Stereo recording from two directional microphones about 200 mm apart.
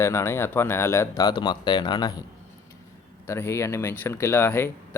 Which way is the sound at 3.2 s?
15° left (ahead or behind).